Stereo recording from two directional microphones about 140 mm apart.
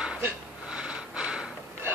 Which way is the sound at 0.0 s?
5° right (ahead or behind).